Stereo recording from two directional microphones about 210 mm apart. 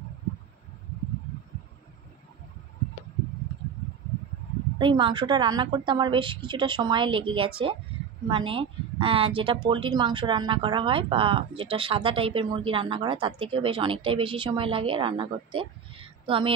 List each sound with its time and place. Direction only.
4.7 s speech: 25° right (ahead or behind)